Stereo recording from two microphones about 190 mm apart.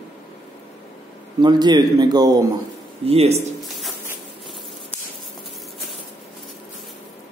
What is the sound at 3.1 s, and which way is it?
Speech, 30° right (ahead or behind).